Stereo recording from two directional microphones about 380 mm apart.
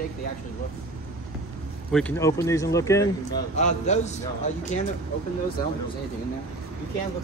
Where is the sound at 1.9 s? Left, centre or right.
Centre.